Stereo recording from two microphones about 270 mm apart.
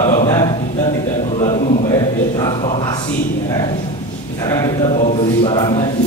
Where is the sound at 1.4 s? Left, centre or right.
Left.